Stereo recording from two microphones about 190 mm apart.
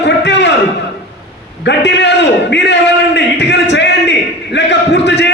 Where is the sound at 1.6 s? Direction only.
65° left (ahead or behind).